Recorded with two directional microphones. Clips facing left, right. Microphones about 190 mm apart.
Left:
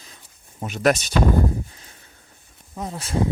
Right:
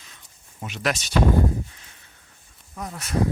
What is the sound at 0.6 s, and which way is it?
Speech, 45° left (ahead or behind).